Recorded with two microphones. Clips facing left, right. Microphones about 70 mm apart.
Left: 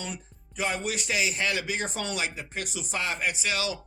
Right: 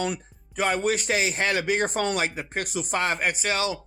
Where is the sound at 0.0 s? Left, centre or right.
Right.